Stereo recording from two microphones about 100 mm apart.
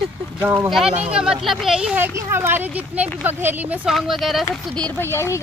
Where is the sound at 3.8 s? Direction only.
Centre (ahead or behind).